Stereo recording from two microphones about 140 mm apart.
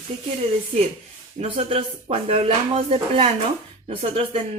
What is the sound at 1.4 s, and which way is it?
Speech, 45° right (ahead or behind).